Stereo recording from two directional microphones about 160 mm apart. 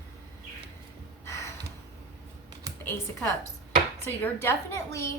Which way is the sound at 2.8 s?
15° left (ahead or behind).